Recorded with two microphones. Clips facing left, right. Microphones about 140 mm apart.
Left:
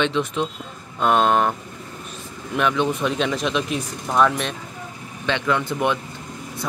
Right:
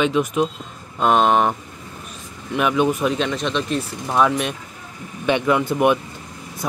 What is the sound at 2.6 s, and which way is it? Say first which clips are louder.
Speech: right 2 dB; 10° right (ahead or behind).